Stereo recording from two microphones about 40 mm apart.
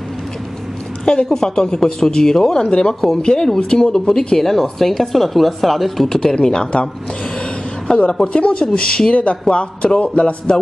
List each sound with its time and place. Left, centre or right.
1.0 s speech: centre
6.0 s speech: centre
7.9 s speech: centre
8.3 s speech: left
9.1 s speech: left